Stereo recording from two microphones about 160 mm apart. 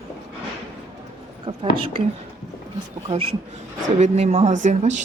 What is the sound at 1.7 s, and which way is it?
Speech, 35° right (ahead or behind).